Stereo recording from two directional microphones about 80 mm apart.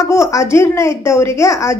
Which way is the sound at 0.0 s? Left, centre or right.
Left.